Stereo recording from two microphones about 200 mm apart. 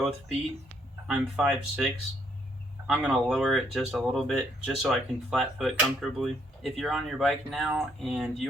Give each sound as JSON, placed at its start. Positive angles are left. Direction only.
{"t": 1.0, "sound": "speech", "side_deg": 0}